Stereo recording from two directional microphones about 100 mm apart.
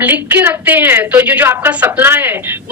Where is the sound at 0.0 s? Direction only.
20° right (ahead or behind).